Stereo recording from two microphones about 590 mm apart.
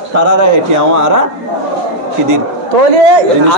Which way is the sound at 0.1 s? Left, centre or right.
Right.